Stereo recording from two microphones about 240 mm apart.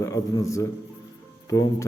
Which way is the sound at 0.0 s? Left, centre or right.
Centre.